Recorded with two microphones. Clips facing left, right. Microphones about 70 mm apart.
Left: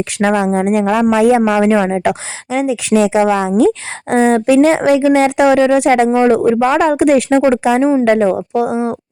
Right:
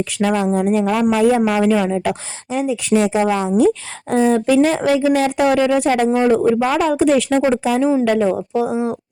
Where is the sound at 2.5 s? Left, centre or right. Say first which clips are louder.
Left 3 dB; left.